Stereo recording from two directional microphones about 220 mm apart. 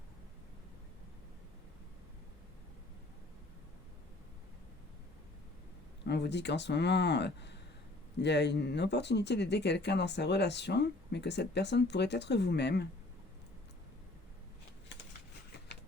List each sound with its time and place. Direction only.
6.1 s speech: 50° left (ahead or behind)